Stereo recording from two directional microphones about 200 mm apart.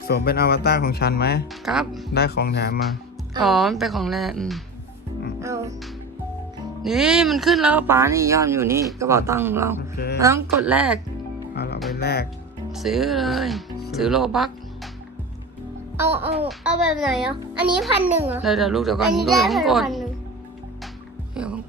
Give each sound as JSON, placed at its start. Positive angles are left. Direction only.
{"t": 0.1, "sound": "speech", "side_deg": 50}
{"t": 1.6, "sound": "speech", "side_deg": 0}
{"t": 2.1, "sound": "speech", "side_deg": 55}
{"t": 3.4, "sound": "speech", "side_deg": 0}
{"t": 5.4, "sound": "music", "side_deg": -15}
{"t": 6.8, "sound": "speech", "side_deg": -5}
{"t": 11.5, "sound": "music", "side_deg": 55}
{"t": 11.9, "sound": "speech", "side_deg": 50}
{"t": 12.7, "sound": "speech", "side_deg": 0}
{"t": 16.0, "sound": "speech", "side_deg": -10}
{"t": 21.3, "sound": "music", "side_deg": -5}